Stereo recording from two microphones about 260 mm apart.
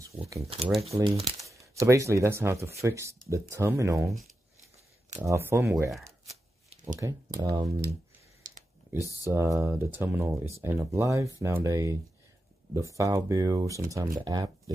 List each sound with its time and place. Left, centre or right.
0.9 s speech: right
5.2 s speech: centre
6.7 s a sound: right
7.0 s speech: centre
8.9 s speech: centre
9.2 s speech: centre